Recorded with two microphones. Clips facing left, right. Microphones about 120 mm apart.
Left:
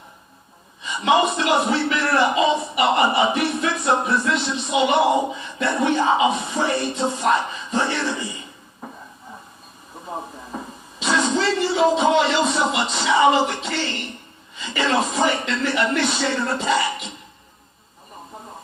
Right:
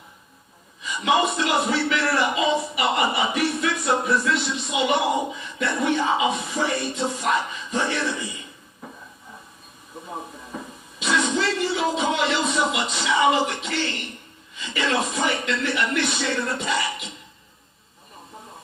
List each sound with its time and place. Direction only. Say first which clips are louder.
0.8 s a man's voice: left 3 dB; 30° left (ahead or behind)
10.5 s a sound: left 3 dB; 35° left (ahead or behind)
11.0 s speech: left 2 dB; 30° left (ahead or behind)